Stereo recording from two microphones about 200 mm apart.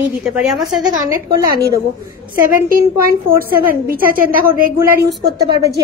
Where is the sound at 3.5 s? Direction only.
45° right (ahead or behind).